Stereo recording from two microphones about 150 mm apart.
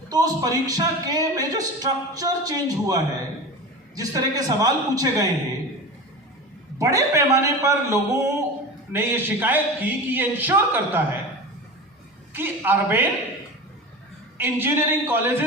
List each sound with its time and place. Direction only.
0.1 s speech: 25° right (ahead or behind)
6.7 s speech: 20° right (ahead or behind)
12.3 s speech: 15° right (ahead or behind)
14.3 s speech: 15° right (ahead or behind)